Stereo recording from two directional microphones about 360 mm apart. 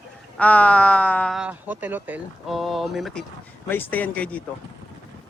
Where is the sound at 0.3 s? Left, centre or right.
Centre.